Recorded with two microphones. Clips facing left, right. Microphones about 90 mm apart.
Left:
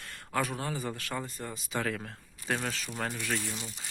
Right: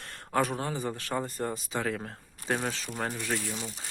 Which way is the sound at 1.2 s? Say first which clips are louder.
Right 7 dB; 45° right (ahead or behind).